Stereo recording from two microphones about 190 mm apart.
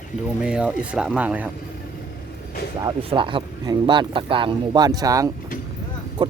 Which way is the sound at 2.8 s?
25° right (ahead or behind).